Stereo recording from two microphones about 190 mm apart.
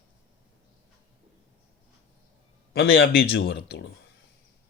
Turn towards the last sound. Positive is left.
turn(degrees=65)  # may be behind; listen again after turning